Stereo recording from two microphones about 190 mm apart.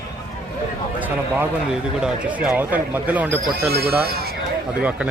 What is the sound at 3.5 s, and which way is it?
Speech, 55° right (ahead or behind).